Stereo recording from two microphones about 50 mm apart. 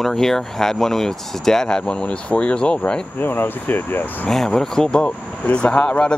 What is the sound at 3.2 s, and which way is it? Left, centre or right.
Speech, left.